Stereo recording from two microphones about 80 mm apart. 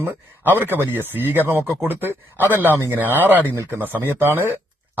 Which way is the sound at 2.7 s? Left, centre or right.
Right.